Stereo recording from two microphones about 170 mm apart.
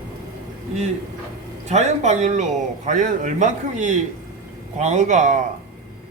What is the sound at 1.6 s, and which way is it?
A man's voice, 40° right (ahead or behind).